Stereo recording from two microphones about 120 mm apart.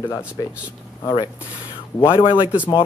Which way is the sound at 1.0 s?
40° left (ahead or behind).